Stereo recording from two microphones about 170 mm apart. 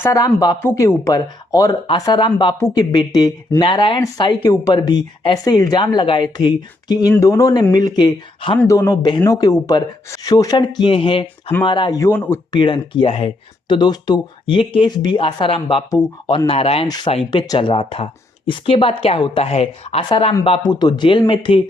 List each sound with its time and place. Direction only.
0.0 s speech: 20° left (ahead or behind)
8.5 s speech: 15° left (ahead or behind)
12.5 s speech: 25° left (ahead or behind)